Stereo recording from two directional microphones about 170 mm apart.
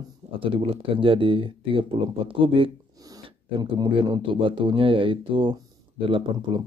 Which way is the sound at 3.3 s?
30° right (ahead or behind).